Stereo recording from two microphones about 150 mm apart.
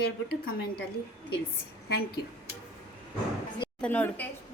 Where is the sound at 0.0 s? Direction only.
90° left.